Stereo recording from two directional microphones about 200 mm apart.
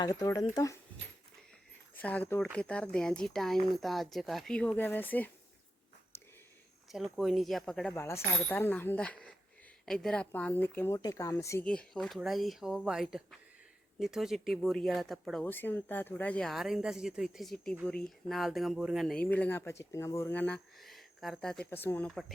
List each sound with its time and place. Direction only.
0.0 s speech: 20° left (ahead or behind)
2.0 s speech: 10° left (ahead or behind)
6.1 s a sound: 15° left (ahead or behind)
6.9 s speech: centre (ahead or behind)